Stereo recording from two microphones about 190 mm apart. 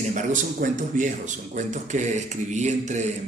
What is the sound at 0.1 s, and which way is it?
Speech, 40° right (ahead or behind).